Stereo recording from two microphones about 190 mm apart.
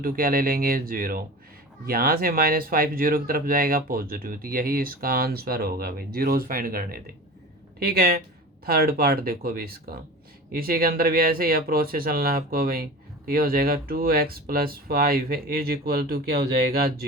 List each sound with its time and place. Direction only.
0.0 s speech: 50° right (ahead or behind)